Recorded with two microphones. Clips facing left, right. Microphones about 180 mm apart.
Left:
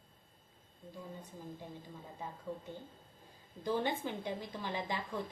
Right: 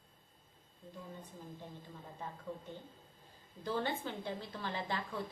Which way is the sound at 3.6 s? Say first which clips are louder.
Left 2 dB; 15° left (ahead or behind).